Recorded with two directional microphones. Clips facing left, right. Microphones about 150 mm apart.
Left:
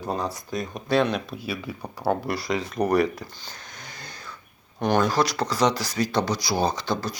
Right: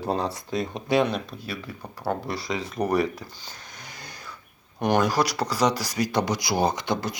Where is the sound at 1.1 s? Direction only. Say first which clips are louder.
Left 2 dB; 10° left (ahead or behind).